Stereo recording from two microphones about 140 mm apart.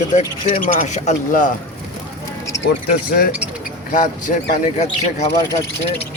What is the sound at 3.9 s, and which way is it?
Speech, 70° left (ahead or behind).